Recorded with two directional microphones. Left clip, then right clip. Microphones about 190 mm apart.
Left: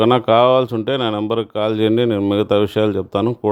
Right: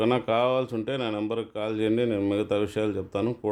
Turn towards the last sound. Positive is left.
turn(degrees=40)  # may be behind; listen again after turning